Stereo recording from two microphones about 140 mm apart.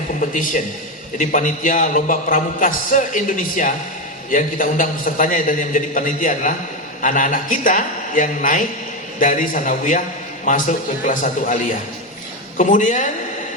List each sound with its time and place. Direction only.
0.2 s a man's voice: 70° left (ahead or behind)